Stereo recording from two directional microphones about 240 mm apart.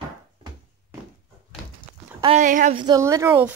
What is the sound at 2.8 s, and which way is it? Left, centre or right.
Speech, centre.